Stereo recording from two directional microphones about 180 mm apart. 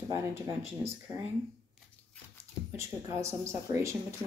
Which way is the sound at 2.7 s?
15° right (ahead or behind).